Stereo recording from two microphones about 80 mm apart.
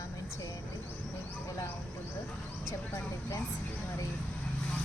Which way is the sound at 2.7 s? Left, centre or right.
Left.